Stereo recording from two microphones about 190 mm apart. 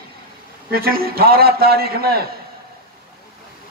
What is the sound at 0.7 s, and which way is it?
A man's voice, 50° right (ahead or behind).